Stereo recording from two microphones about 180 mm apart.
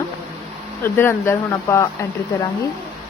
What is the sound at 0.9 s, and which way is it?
Speech, 15° left (ahead or behind).